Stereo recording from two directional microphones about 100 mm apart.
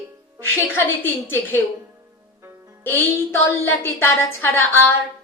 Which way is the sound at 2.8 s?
20° left (ahead or behind).